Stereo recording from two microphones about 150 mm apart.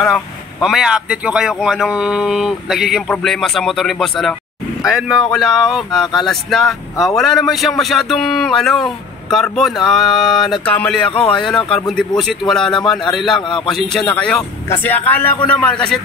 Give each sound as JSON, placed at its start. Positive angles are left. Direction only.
{"t": 0.0, "sound": "speech", "side_deg": 0}
{"t": 11.1, "sound": "speech", "side_deg": 40}
{"t": 11.3, "sound": "speech", "side_deg": 5}